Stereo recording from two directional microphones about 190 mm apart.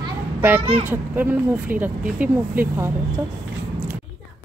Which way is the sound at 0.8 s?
10° right (ahead or behind).